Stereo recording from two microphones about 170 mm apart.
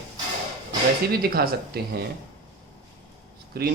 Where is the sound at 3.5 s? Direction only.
65° right (ahead or behind).